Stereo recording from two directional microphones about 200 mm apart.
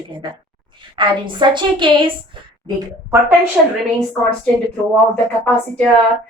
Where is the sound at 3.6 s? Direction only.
Centre (ahead or behind).